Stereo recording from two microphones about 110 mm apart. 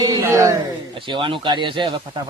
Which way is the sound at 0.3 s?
25° right (ahead or behind).